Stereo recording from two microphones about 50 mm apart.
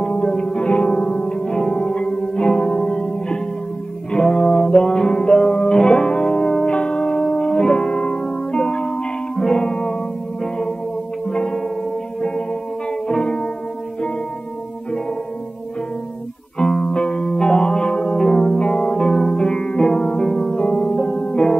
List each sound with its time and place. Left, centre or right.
0.0 s music: left
11.3 s music: centre
13.1 s music: centre
16.5 s music: centre